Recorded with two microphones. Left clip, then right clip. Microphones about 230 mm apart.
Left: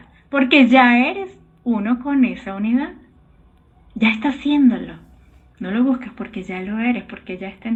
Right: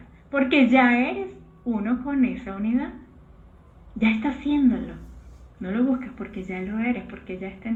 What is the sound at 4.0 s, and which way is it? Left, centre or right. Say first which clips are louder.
Speech: left 6 dB; left.